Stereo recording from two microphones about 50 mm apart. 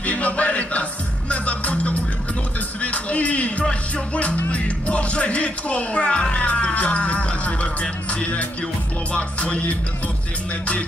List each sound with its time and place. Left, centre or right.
0.0 s music: left
3.6 s speech: left